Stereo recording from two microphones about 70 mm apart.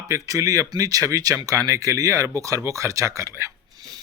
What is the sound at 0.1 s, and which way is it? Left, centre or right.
Speech, right.